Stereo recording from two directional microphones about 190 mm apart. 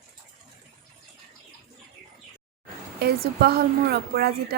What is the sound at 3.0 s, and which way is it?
A woman's voice, 55° right (ahead or behind).